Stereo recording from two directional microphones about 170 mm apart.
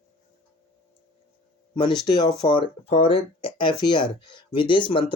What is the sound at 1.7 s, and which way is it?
Speech, 25° left (ahead or behind).